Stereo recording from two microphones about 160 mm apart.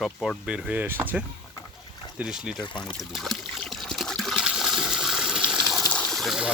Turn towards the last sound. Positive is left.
turn(degrees=0)  # may be behind; listen again after turning